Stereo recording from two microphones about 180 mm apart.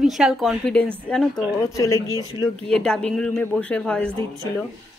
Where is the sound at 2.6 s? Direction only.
5° left (ahead or behind).